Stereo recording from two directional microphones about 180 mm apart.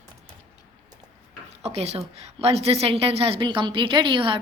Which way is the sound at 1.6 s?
35° right (ahead or behind).